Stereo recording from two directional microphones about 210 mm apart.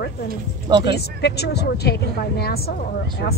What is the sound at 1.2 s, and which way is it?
A woman's voice, 50° left (ahead or behind).